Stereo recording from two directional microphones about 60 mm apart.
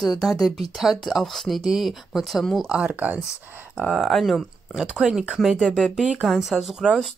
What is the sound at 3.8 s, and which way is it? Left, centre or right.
Speech, centre.